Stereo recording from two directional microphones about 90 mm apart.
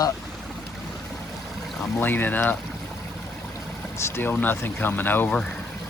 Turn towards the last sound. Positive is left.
turn(degrees=20)  # may be behind; listen again after turning